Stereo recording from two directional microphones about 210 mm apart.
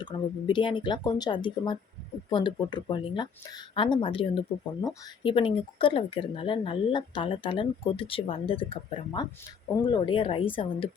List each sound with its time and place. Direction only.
0.0 s speech: 20° left (ahead or behind)